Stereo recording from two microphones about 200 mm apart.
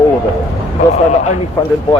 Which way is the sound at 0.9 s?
35° left (ahead or behind).